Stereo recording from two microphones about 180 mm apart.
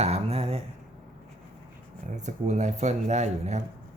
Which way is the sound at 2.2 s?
40° right (ahead or behind).